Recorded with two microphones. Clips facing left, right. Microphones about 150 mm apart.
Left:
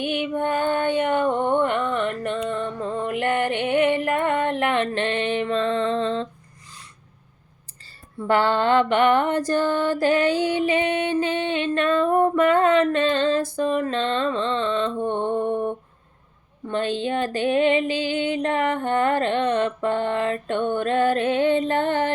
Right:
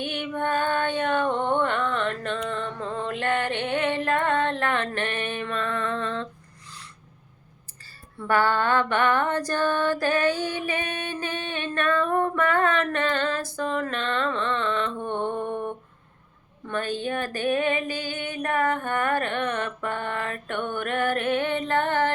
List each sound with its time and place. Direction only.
0.0 s music: 15° left (ahead or behind)
8.3 s music: 20° left (ahead or behind)